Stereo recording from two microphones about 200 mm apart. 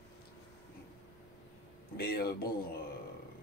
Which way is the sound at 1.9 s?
50° left (ahead or behind).